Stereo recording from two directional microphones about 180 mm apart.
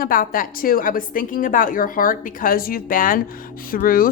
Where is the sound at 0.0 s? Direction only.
55° left (ahead or behind).